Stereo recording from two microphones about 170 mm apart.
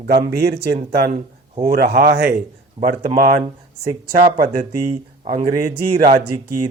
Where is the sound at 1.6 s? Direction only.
60° right (ahead or behind); by 2.2 s 80° right.